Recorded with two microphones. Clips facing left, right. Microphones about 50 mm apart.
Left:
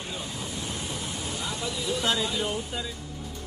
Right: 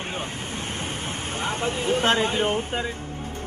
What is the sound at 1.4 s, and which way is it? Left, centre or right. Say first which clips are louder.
Speech: right 8 dB; right.